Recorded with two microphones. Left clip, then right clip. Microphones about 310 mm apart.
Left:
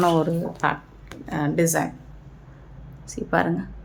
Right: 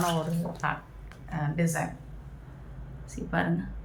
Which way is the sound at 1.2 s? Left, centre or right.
Left.